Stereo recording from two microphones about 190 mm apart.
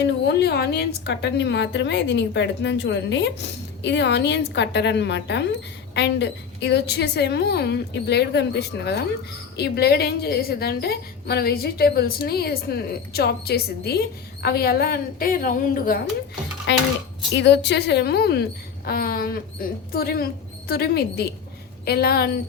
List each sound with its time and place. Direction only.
0.0 s a woman's voice: 60° left (ahead or behind)
16.7 s a woman's voice: 65° left (ahead or behind)